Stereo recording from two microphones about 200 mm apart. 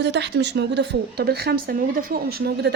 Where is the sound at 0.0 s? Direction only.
60° right (ahead or behind).